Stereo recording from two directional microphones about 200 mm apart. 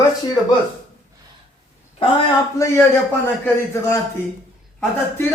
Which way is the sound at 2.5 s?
15° left (ahead or behind).